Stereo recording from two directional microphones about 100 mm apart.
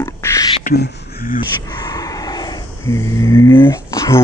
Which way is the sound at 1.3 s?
45° left (ahead or behind).